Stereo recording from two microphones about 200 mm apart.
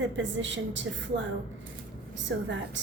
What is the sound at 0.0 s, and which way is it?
Speech, 65° right (ahead or behind).